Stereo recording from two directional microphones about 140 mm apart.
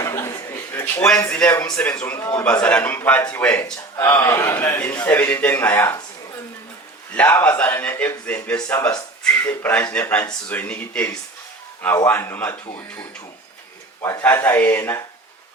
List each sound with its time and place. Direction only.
0.0 s chuckle: 20° left (ahead or behind)
1.3 s a man's voice: 10° left (ahead or behind)
7.1 s a man's voice: 10° left (ahead or behind)
8.7 s a sound: 10° left (ahead or behind)
9.4 s a man's voice: 15° left (ahead or behind)
14.0 s a man's voice: 15° left (ahead or behind)